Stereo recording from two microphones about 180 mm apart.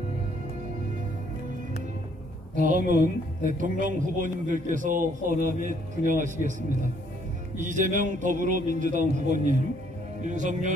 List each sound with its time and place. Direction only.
2.5 s a man's voice: 45° right (ahead or behind)